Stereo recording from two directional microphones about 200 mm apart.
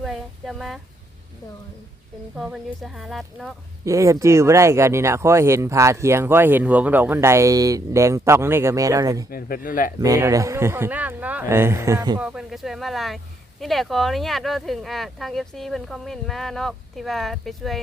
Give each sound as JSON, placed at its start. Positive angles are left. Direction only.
{"t": 0.0, "sound": "a sound", "side_deg": 0}
{"t": 2.3, "sound": "speech", "side_deg": -5}
{"t": 3.8, "sound": "speech", "side_deg": -15}
{"t": 9.3, "sound": "speech", "side_deg": 45}
{"t": 10.0, "sound": "speech", "side_deg": -15}
{"t": 12.2, "sound": "speech", "side_deg": -5}